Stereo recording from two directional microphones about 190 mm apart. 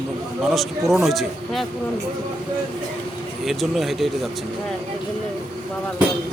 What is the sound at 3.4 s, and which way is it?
Speech, centre (ahead or behind).